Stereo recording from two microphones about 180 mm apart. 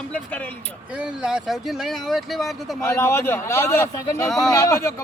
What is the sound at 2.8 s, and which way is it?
Speech, 15° left (ahead or behind).